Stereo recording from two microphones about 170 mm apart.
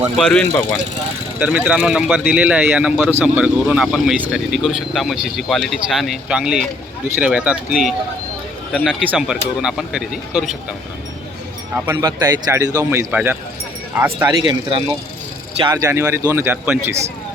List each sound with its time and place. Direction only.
0.2 s speech: centre (ahead or behind)
1.4 s speech: 10° right (ahead or behind)
11.9 s speech: 20° right (ahead or behind)
14.3 s speech: 30° right (ahead or behind); by 17.0 s 15° right (ahead or behind)